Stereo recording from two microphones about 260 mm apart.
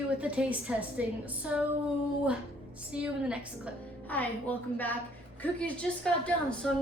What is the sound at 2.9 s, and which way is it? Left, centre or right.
Speech, centre.